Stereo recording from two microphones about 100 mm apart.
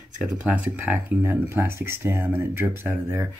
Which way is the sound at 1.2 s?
25° right (ahead or behind).